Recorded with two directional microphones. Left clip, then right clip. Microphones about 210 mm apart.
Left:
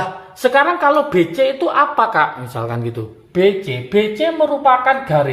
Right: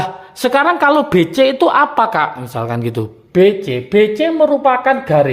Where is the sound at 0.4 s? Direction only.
50° right (ahead or behind).